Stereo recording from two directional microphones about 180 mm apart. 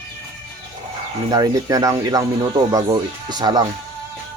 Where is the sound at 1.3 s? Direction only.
20° right (ahead or behind).